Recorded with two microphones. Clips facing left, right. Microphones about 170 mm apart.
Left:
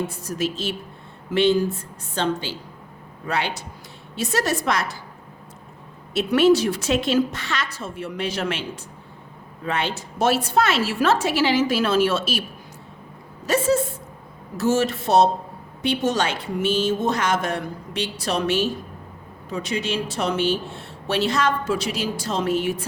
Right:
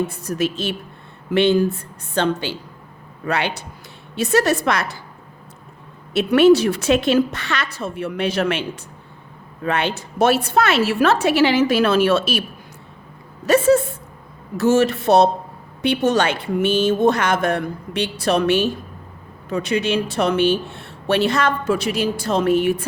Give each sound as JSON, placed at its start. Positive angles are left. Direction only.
{"t": 0.1, "sound": "speech", "side_deg": -60}
{"t": 6.1, "sound": "speech", "side_deg": -65}
{"t": 13.4, "sound": "speech", "side_deg": -60}